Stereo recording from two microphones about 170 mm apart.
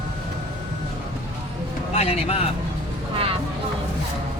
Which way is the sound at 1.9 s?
40° left (ahead or behind).